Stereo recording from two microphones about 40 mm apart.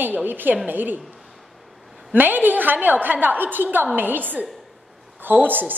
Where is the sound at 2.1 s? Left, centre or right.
Right.